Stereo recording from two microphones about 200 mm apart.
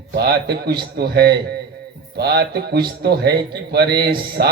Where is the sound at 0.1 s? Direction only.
55° right (ahead or behind).